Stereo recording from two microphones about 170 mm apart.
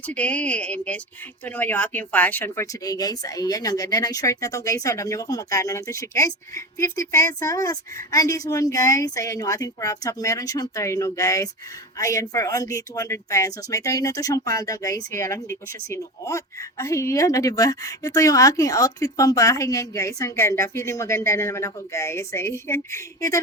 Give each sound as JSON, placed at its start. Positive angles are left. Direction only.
{"t": 0.0, "sound": "speech", "side_deg": 10}